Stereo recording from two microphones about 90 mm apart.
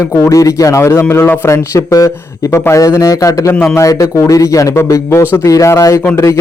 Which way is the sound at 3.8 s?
35° left (ahead or behind).